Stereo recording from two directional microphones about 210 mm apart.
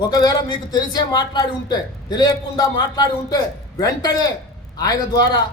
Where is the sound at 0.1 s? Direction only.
20° left (ahead or behind).